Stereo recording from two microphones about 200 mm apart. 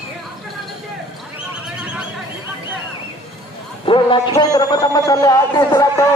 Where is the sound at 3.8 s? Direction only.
25° left (ahead or behind).